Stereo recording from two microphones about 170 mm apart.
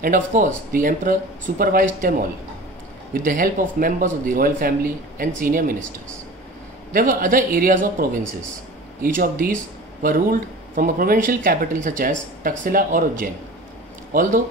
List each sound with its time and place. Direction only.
0.0 s speech: 50° right (ahead or behind)
6.9 s speech: 55° right (ahead or behind)